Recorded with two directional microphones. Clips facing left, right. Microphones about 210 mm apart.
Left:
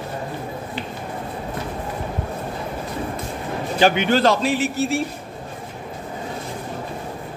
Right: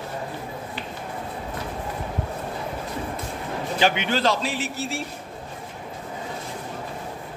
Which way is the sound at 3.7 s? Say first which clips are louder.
Left 6 dB; 45° left (ahead or behind).